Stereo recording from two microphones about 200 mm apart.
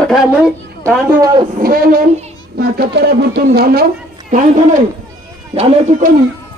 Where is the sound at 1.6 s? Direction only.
45° right (ahead or behind).